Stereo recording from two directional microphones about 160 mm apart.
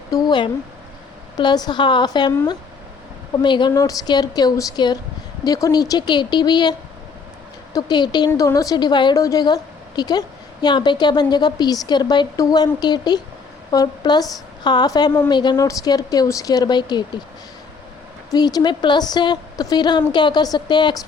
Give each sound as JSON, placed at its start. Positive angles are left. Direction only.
{"t": 0.1, "sound": "a sound", "side_deg": 25}
{"t": 1.4, "sound": "a woman's voice", "side_deg": 25}
{"t": 3.3, "sound": "a woman's voice", "side_deg": 30}
{"t": 18.3, "sound": "a woman's voice", "side_deg": 25}